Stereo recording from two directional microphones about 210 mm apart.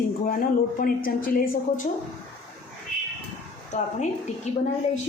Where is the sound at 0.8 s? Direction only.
40° left (ahead or behind).